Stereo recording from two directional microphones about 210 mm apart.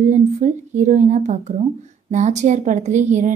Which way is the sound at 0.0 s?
35° right (ahead or behind).